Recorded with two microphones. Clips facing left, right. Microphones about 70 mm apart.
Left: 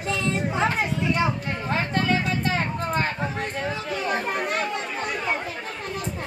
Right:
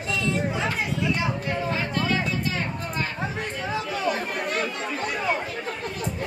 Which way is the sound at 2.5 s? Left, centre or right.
Left.